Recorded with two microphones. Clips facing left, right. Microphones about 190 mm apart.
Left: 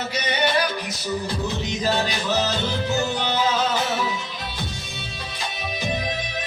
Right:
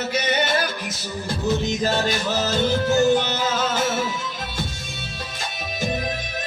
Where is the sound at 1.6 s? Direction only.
45° right (ahead or behind).